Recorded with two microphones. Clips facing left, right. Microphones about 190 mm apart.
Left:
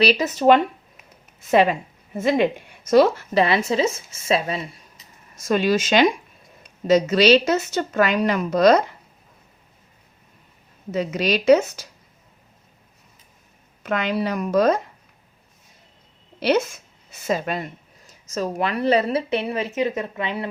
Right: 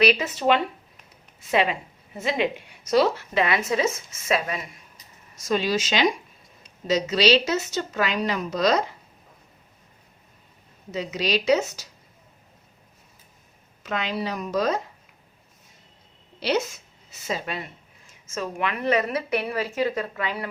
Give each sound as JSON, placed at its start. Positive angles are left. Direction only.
{"t": 0.0, "sound": "a woman's voice", "side_deg": 35}
{"t": 3.3, "sound": "speech", "side_deg": 30}
{"t": 5.4, "sound": "a woman's voice", "side_deg": 55}
{"t": 10.9, "sound": "a woman's voice", "side_deg": 55}
{"t": 13.8, "sound": "speech", "side_deg": 55}
{"t": 16.4, "sound": "a woman's voice", "side_deg": 55}